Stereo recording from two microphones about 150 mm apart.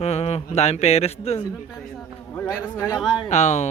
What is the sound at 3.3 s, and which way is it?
Speech, 50° left (ahead or behind).